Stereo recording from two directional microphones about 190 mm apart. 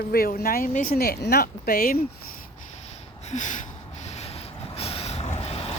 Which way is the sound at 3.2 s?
40° left (ahead or behind).